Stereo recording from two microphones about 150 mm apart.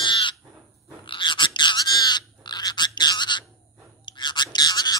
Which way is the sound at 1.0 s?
35° left (ahead or behind).